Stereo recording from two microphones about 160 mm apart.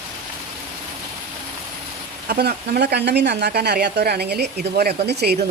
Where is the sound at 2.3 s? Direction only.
75° right (ahead or behind).